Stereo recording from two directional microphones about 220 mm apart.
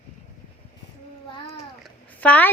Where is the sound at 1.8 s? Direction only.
5° left (ahead or behind).